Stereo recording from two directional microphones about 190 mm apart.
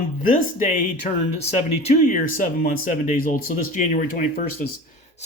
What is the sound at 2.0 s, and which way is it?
Speech, 45° left (ahead or behind).